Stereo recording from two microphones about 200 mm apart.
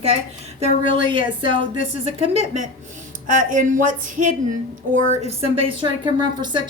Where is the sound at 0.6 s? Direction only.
25° right (ahead or behind).